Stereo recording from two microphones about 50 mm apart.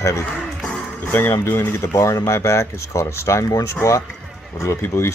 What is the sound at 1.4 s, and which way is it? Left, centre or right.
Speech, left.